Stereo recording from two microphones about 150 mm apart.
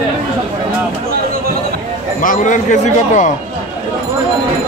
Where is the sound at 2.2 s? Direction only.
60° left (ahead or behind).